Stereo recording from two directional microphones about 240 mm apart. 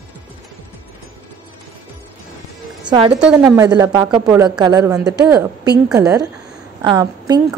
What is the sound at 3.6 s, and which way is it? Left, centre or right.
A woman's voice, centre.